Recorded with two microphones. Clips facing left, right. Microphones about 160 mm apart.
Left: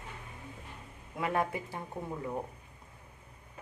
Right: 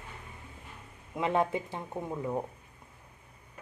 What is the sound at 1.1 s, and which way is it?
Speech, 20° right (ahead or behind).